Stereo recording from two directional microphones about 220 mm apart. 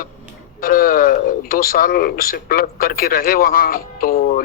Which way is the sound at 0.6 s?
40° left (ahead or behind).